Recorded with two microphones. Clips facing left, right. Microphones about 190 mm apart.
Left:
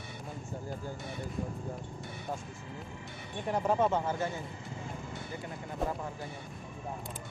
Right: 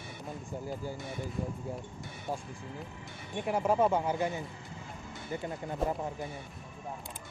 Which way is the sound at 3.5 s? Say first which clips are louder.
Right 1 dB; 5° right (ahead or behind).